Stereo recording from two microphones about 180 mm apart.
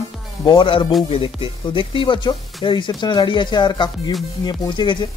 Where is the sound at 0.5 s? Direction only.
30° left (ahead or behind).